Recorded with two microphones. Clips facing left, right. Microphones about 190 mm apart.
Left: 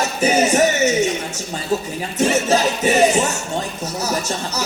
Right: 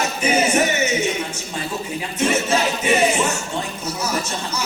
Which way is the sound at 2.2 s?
40° left (ahead or behind).